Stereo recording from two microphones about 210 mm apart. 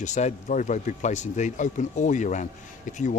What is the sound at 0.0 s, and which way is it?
Speech, 35° left (ahead or behind).